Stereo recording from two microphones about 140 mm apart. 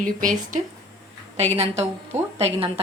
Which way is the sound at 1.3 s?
50° right (ahead or behind).